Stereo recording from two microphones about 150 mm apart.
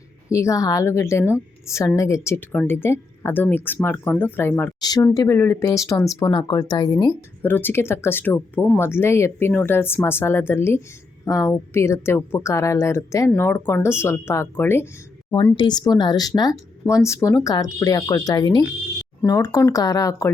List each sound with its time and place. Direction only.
0.3 s a woman's voice: 20° left (ahead or behind)
4.8 s a woman's voice: 25° left (ahead or behind)
7.4 s a woman's voice: 15° left (ahead or behind)
15.5 s a woman's voice: 30° left (ahead or behind)